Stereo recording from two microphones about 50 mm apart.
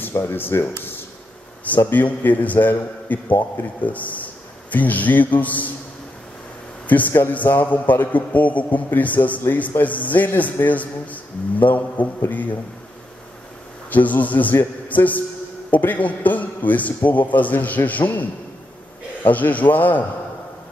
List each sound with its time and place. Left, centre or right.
0.1 s speech: left
1.9 s a man's voice: left
6.9 s a man's voice: left
13.8 s a man's voice: left
19.2 s a man's voice: left